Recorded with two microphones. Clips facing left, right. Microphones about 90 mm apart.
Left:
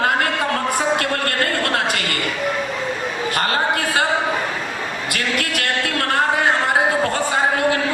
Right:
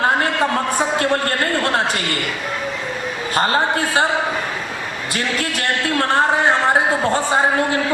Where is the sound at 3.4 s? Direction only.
30° right (ahead or behind).